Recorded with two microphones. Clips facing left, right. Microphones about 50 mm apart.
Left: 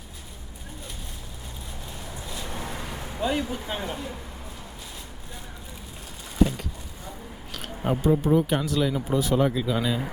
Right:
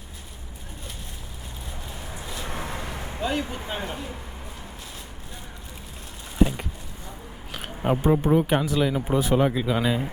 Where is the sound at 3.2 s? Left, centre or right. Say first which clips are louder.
Left 1 dB; centre.